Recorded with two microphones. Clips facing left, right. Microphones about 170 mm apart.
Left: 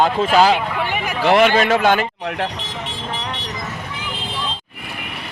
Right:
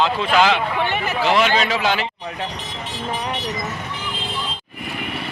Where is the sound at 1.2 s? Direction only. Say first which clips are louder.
Left 5 dB; 55° left (ahead or behind).